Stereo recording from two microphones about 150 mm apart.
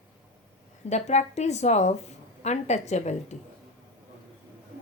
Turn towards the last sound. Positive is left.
turn(degrees=50)  # may be behind; listen again after turning